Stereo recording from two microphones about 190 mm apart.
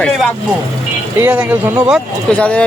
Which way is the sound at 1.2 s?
10° right (ahead or behind).